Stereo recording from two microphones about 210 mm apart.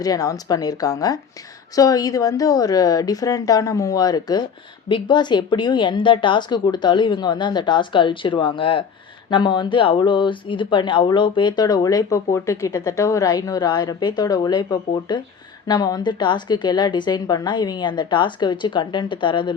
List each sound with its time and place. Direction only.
0.0 s speech: 15° left (ahead or behind)